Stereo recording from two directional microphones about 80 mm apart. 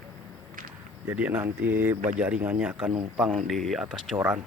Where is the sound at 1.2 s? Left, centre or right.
Right.